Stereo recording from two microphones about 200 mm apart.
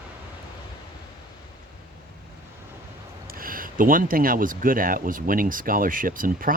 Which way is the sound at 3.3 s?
45° right (ahead or behind).